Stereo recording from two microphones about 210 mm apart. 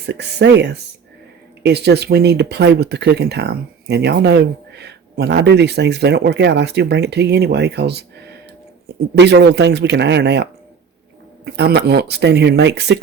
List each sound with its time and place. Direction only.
0.0 s speech: 55° right (ahead or behind)
9.1 s speech: 55° right (ahead or behind)